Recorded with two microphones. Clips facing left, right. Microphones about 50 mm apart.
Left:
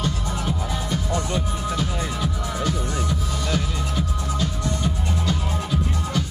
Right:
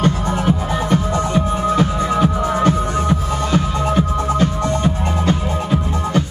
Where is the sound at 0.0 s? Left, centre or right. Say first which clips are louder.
Right 9 dB; right.